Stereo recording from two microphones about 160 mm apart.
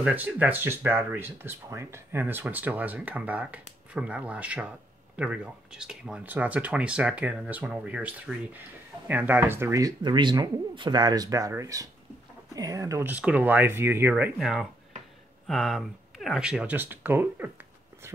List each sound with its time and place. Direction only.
0.0 s speech: 10° right (ahead or behind)